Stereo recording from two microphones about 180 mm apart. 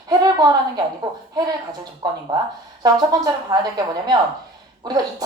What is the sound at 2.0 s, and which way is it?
A woman's voice, 20° right (ahead or behind).